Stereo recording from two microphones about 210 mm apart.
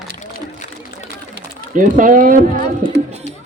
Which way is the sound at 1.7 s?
40° right (ahead or behind).